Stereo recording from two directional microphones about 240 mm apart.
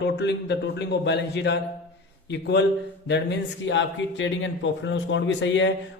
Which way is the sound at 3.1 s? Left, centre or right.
Left.